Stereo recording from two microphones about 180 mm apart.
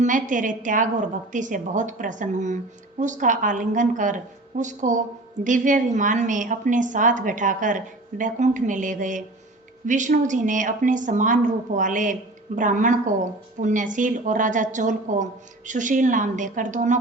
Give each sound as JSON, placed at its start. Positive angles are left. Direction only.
{"t": 0.0, "sound": "a woman's voice", "side_deg": -45}